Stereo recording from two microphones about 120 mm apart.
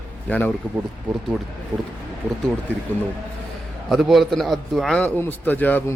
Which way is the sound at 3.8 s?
Centre (ahead or behind).